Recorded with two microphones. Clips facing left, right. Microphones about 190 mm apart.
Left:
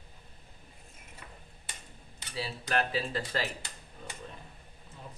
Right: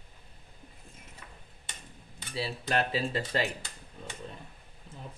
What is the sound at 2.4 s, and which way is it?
Speech, 25° right (ahead or behind).